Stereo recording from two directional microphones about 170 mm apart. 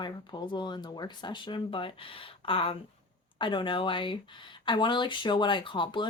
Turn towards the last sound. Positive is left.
turn(degrees=30)  # may be behind; listen again after turning